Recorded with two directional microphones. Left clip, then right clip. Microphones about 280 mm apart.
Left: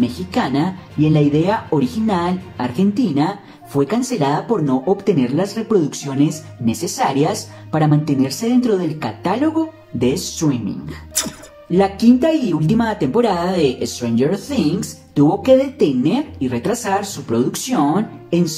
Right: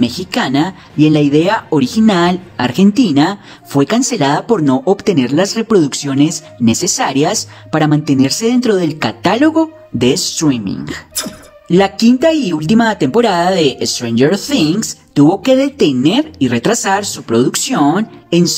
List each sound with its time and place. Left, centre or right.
0.0 s speech: right
11.2 s speech: centre
11.7 s speech: right